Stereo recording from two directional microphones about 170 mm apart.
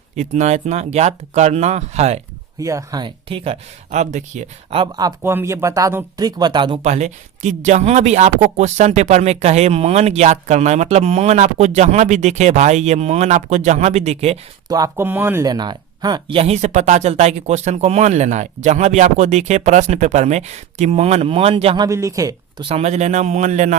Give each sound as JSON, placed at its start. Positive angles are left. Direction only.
{"t": 0.2, "sound": "speech", "side_deg": -45}
{"t": 2.6, "sound": "speech", "side_deg": -20}
{"t": 4.8, "sound": "speech", "side_deg": -25}
{"t": 6.8, "sound": "speech", "side_deg": -40}
{"t": 14.7, "sound": "speech", "side_deg": -20}
{"t": 21.8, "sound": "speech", "side_deg": -20}
{"t": 22.7, "sound": "a man's voice", "side_deg": -40}